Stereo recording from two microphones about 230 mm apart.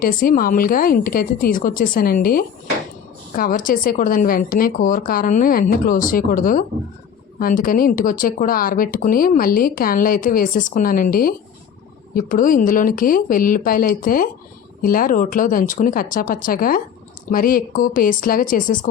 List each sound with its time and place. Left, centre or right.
0.0 s speech: left